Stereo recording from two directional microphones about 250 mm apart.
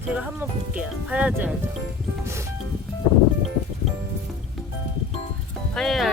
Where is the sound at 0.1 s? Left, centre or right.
Centre.